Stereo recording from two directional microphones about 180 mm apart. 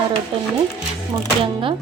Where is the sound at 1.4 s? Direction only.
30° right (ahead or behind).